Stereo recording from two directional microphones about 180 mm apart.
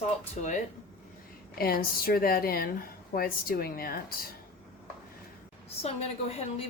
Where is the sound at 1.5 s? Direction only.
55° left (ahead or behind).